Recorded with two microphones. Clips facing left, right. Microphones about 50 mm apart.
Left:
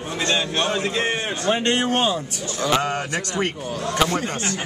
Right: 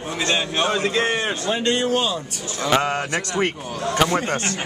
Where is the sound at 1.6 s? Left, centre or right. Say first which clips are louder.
Even; left.